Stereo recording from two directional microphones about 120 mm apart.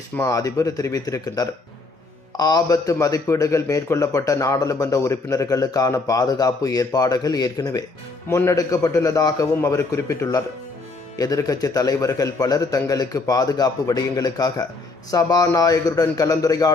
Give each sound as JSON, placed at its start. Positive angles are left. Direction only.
{"t": 0.2, "sound": "speech", "side_deg": 30}